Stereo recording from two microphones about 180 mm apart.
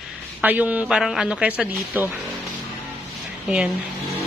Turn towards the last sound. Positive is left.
turn(degrees=-5)  # may be behind; listen again after turning